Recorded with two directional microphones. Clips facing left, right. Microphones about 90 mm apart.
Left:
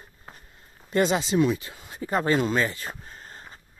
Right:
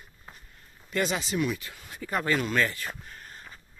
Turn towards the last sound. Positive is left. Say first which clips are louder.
# left 2 dB
turn(degrees=30)  # may be behind; listen again after turning